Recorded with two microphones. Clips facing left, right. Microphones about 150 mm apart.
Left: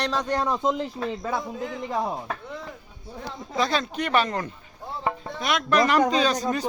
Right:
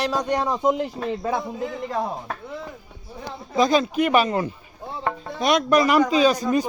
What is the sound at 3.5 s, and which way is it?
Speech, 15° right (ahead or behind).